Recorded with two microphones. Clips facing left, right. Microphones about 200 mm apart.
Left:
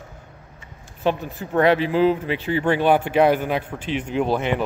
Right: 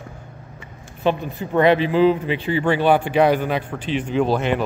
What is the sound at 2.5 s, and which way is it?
Speech, 10° right (ahead or behind).